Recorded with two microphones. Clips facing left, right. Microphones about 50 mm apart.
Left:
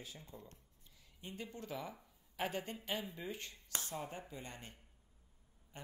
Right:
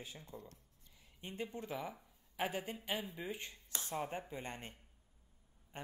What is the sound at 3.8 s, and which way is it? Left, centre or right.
Speech, right.